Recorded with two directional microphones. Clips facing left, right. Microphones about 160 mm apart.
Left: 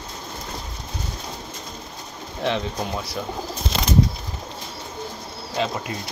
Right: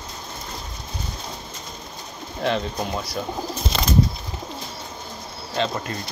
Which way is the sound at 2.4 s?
Centre (ahead or behind).